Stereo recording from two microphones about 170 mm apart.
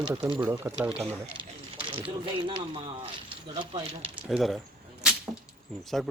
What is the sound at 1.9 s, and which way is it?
Speech, 30° right (ahead or behind).